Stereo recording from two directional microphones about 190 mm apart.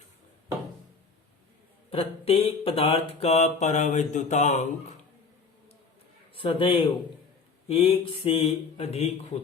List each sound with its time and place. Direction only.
1.9 s mantra: 30° left (ahead or behind)
6.3 s a man's voice: 25° left (ahead or behind)
7.7 s mantra: 30° left (ahead or behind)